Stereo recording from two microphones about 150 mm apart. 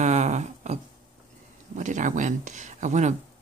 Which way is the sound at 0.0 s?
50° right (ahead or behind).